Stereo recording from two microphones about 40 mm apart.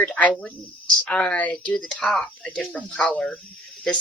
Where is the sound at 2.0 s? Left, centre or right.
Centre.